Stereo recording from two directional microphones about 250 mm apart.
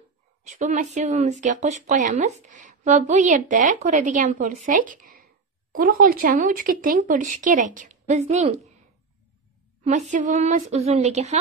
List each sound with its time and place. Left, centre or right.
0.4 s speech: right
9.8 s speech: right